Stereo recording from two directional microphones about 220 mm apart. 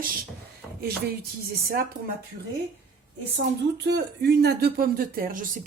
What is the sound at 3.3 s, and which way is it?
Speech, 50° right (ahead or behind).